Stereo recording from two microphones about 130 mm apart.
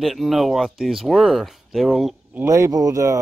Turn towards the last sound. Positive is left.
turn(degrees=-25)  # may be behind; listen again after turning